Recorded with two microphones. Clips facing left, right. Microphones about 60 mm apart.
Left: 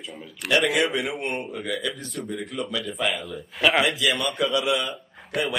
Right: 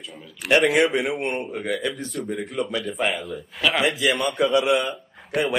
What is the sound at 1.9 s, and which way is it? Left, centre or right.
Speech, centre.